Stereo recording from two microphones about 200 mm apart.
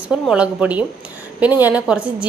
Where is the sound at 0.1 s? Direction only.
5° right (ahead or behind).